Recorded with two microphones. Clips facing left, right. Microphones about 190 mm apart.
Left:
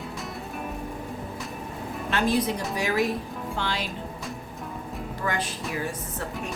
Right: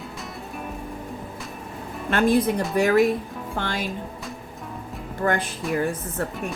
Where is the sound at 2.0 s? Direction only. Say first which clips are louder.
Right 5 dB; 55° right (ahead or behind).